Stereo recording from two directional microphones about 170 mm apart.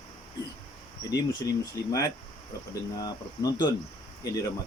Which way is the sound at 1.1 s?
20° left (ahead or behind).